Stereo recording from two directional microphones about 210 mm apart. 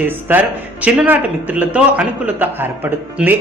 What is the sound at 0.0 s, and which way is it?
Speech, 10° right (ahead or behind).